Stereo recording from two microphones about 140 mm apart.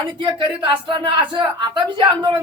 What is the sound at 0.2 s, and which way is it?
Speech, 35° right (ahead or behind).